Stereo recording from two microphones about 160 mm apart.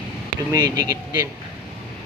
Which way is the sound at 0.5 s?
20° right (ahead or behind).